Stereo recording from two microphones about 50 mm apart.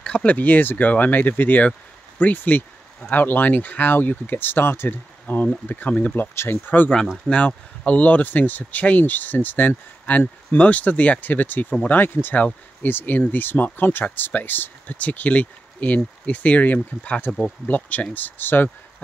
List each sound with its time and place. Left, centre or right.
0.0 s speech: left
5.7 s speech: left
6.3 s speech: left
7.2 s speech: left